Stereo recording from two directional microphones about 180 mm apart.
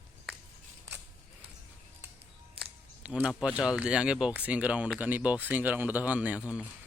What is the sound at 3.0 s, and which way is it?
Speech, 10° right (ahead or behind).